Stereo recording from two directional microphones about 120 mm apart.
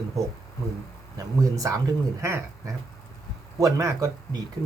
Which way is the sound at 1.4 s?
30° right (ahead or behind).